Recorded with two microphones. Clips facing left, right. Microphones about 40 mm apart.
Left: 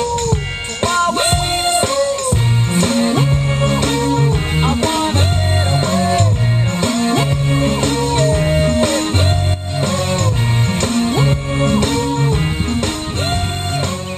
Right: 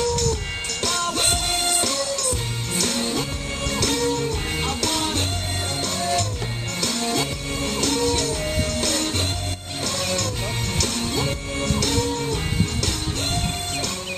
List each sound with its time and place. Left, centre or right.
0.1 s music: left